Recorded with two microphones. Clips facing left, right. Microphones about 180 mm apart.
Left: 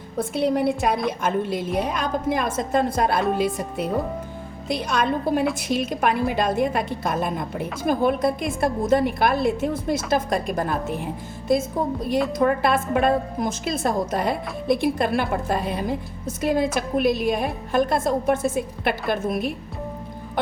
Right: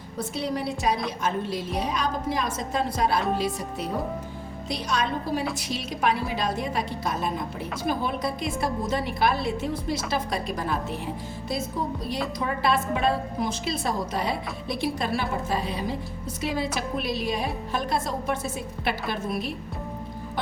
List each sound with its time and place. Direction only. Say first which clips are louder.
0.2 s a woman's voice: left 7 dB; 55° left (ahead or behind)